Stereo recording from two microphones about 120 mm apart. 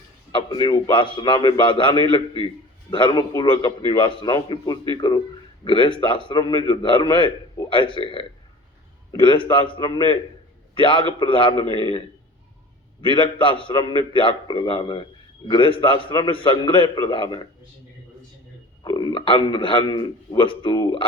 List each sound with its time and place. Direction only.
0.3 s a man's voice: 40° left (ahead or behind)
18.8 s a man's voice: 40° left (ahead or behind)